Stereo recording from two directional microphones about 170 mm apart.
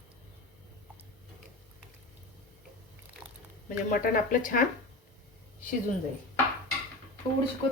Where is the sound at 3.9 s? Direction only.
55° left (ahead or behind).